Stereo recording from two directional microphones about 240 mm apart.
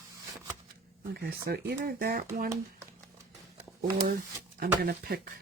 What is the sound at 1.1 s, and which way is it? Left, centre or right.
Speech, right.